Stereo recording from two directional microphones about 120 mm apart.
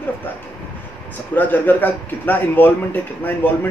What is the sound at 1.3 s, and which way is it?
A man's voice, 15° left (ahead or behind).